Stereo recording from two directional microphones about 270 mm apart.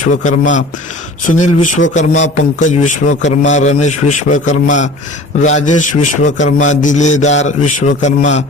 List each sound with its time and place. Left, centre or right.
0.1 s a man's voice: left